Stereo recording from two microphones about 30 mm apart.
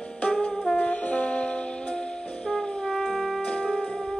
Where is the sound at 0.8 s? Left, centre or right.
Left.